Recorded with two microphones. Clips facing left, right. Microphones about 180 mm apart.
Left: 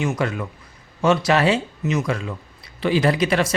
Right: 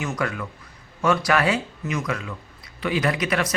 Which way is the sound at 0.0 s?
25° left (ahead or behind).